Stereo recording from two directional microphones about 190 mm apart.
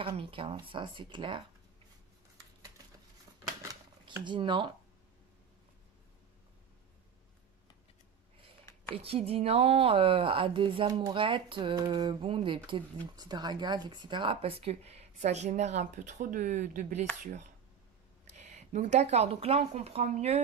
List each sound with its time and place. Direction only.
0.0 s a woman's voice: 30° right (ahead or behind)
3.6 s a sound: 20° right (ahead or behind)
8.9 s a woman's voice: 30° right (ahead or behind)